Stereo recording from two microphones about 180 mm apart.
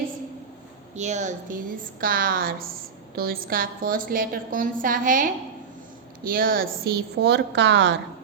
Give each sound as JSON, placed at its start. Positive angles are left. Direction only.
{"t": 0.9, "sound": "a woman's voice", "side_deg": -40}